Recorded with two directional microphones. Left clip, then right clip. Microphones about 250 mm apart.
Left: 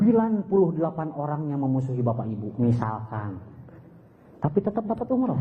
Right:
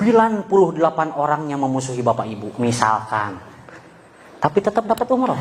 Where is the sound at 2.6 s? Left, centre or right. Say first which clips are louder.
Right 11 dB; centre.